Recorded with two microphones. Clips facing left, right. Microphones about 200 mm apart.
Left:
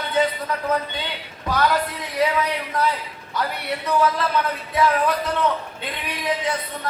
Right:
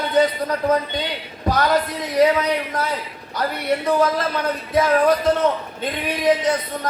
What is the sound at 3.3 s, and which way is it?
A man's voice, 45° right (ahead or behind).